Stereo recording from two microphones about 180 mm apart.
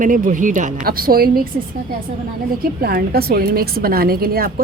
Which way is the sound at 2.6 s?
55° right (ahead or behind).